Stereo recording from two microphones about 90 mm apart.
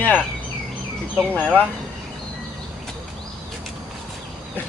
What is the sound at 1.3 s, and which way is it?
Speech, 15° left (ahead or behind).